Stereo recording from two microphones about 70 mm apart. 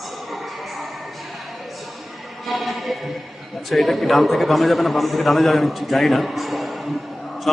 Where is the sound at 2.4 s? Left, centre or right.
Centre.